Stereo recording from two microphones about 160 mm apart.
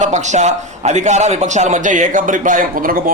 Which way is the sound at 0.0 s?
45° right (ahead or behind).